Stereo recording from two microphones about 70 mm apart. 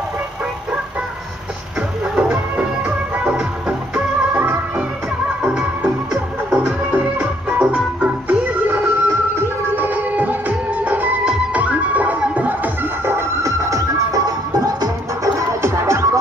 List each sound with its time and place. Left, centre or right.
1.8 s music: centre
5.4 s music: centre
8.6 s music: right
13.5 s music: right
15.3 s music: right